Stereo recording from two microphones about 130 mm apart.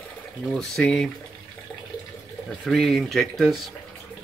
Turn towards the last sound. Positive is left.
turn(degrees=0)  # may be behind; listen again after turning